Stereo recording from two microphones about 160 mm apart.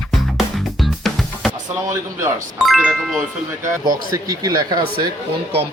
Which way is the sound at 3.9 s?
25° right (ahead or behind).